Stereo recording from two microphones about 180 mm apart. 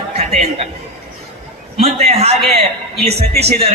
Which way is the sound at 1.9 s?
35° right (ahead or behind).